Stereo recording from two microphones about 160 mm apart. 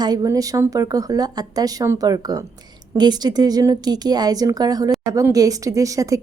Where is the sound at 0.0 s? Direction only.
25° right (ahead or behind).